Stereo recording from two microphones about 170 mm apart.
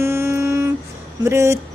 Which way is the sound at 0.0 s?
15° right (ahead or behind).